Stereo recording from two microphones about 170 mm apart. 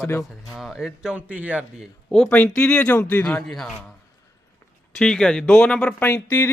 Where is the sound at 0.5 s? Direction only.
5° right (ahead or behind).